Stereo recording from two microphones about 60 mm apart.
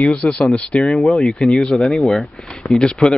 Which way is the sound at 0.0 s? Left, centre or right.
Centre.